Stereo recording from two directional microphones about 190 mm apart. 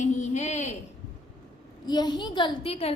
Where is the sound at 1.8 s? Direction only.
20° left (ahead or behind).